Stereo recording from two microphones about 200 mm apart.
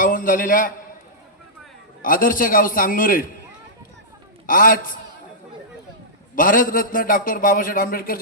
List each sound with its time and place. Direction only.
0.0 s a man's voice: 45° left (ahead or behind)
2.0 s a man's voice: 45° left (ahead or behind)
4.4 s a man's voice: 45° left (ahead or behind)
6.3 s a man's voice: 45° left (ahead or behind)